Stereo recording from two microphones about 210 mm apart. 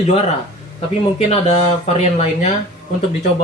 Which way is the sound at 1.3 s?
30° left (ahead or behind).